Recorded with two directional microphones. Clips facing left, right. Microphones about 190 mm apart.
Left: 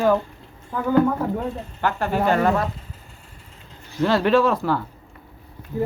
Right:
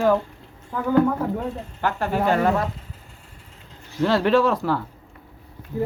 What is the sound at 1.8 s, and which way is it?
Speech, 5° right (ahead or behind).